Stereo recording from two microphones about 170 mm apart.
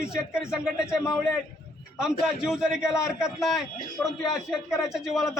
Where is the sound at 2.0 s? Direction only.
5° right (ahead or behind).